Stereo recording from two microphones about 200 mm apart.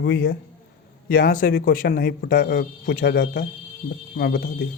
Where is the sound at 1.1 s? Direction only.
45° left (ahead or behind).